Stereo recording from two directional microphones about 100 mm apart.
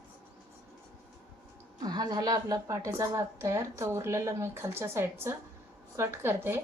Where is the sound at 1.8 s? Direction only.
40° right (ahead or behind).